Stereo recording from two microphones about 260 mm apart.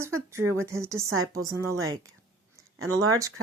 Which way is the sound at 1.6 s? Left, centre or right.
Right.